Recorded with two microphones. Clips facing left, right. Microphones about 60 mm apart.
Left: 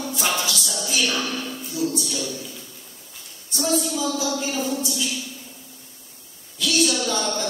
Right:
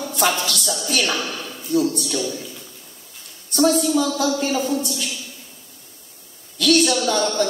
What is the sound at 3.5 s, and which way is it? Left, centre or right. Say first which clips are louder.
A woman's voice: right 7 dB; right.